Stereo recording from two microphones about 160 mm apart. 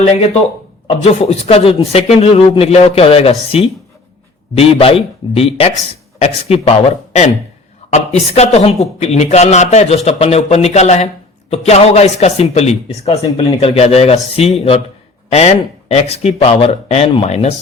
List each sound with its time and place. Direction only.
0.0 s a man's voice: 40° left (ahead or behind)